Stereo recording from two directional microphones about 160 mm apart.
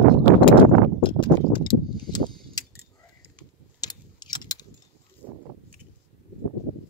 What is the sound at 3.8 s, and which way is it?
Keys jangling, 25° left (ahead or behind).